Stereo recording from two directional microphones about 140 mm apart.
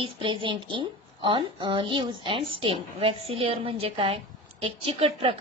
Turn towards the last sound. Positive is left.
turn(degrees=-40)  # may be behind; listen again after turning